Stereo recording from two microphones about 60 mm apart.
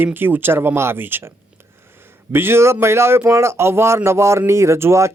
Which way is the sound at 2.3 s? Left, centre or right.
Right.